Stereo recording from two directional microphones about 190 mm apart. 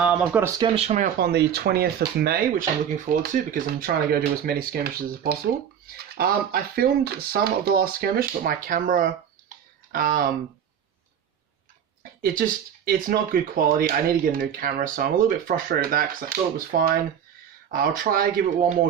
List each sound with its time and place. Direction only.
0.0 s speech: 5° right (ahead or behind)
0.6 s speech: 35° right (ahead or behind)
1.2 s speech: 60° right (ahead or behind)
12.2 s speech: 50° right (ahead or behind)